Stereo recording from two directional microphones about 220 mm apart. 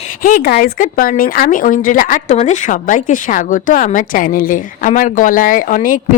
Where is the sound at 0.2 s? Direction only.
40° left (ahead or behind).